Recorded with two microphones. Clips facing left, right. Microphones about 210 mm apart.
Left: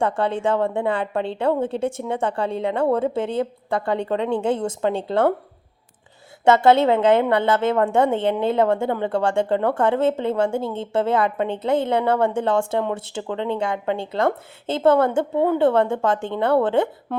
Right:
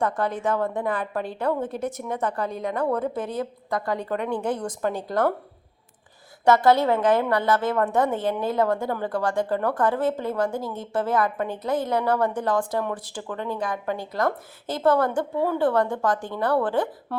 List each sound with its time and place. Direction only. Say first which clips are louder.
0.0 s a woman's voice: left 4 dB; 30° left (ahead or behind)
6.4 s a woman's voice: left 3 dB; 25° left (ahead or behind)